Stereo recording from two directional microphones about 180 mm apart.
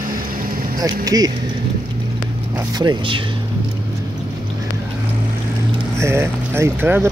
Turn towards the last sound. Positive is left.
turn(degrees=-10)  # may be behind; listen again after turning